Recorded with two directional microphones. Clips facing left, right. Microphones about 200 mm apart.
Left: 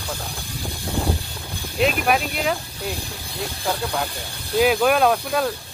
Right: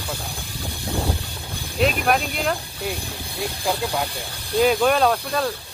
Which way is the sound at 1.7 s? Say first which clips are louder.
Even; 5° left (ahead or behind).